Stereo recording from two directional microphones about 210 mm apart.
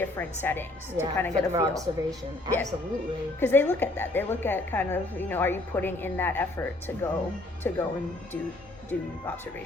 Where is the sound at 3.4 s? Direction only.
10° left (ahead or behind).